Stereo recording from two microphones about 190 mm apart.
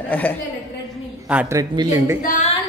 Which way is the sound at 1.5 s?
20° right (ahead or behind).